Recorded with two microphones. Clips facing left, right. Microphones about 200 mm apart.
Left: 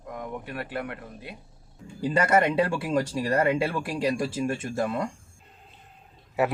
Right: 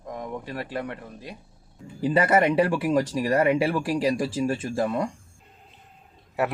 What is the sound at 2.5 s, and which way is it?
Speech, 20° right (ahead or behind).